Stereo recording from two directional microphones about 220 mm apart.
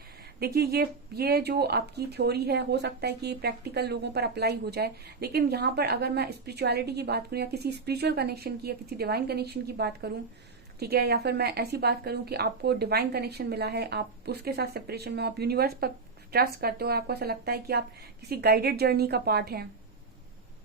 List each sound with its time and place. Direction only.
0.3 s speech: 45° right (ahead or behind)